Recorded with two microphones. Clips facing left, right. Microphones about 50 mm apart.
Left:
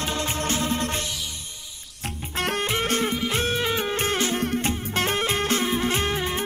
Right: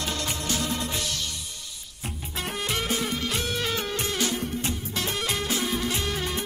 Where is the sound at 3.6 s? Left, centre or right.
Left.